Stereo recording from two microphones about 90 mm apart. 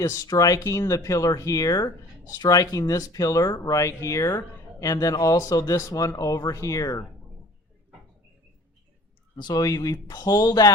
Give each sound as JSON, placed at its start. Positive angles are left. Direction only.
{"t": 0.0, "sound": "speech", "side_deg": 40}
{"t": 9.4, "sound": "speech", "side_deg": 45}